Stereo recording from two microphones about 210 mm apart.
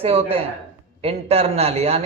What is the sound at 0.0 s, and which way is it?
Speech, 30° right (ahead or behind).